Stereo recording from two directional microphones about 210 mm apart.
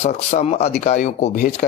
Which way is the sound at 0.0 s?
30° left (ahead or behind).